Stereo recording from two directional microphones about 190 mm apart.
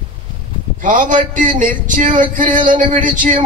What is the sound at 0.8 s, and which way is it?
Speech, 45° right (ahead or behind).